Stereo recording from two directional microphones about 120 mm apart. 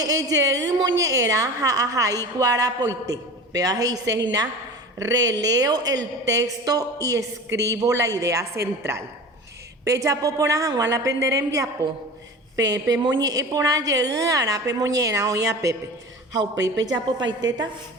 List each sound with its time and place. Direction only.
0.0 s a woman's voice: 30° right (ahead or behind)